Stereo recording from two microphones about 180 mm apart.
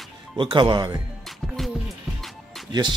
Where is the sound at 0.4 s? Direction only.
25° right (ahead or behind).